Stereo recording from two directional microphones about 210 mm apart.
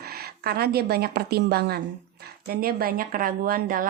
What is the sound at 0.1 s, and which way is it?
Speech, 45° right (ahead or behind).